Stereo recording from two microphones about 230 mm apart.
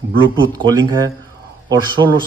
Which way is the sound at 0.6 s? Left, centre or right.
Centre.